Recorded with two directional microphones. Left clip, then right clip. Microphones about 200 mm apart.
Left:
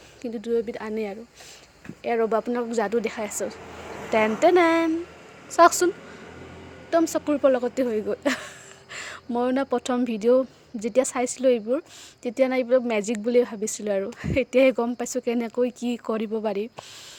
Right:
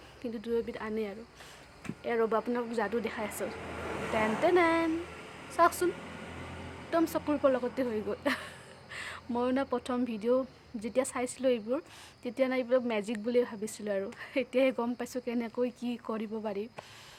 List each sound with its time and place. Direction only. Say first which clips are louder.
0.2 s a woman's voice: left 7 dB; 30° left (ahead or behind)
6.9 s a woman's voice: left 8 dB; 30° left (ahead or behind)